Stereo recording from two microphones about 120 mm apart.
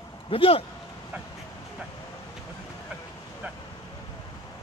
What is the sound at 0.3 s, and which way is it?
Speech, 50° left (ahead or behind).